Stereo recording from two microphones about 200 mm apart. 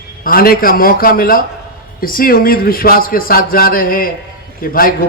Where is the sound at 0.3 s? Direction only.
45° left (ahead or behind).